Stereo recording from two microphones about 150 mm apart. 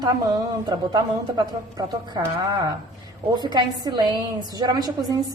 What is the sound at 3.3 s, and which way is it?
A woman's voice, 30° right (ahead or behind).